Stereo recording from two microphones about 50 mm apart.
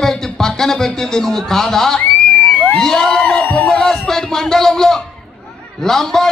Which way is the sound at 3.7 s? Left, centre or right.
Centre.